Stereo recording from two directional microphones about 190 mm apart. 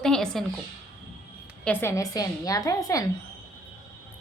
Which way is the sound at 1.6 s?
10° left (ahead or behind).